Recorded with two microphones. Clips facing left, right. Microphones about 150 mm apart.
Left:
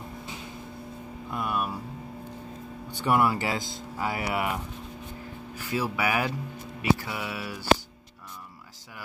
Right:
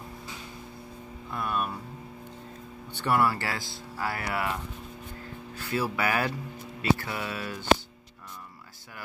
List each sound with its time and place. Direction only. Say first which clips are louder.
1.3 s music: left 1 dB; 10° left (ahead or behind)
2.9 s speech: left 2 dB; 15° left (ahead or behind)
5.6 s speech: even; 15° left (ahead or behind)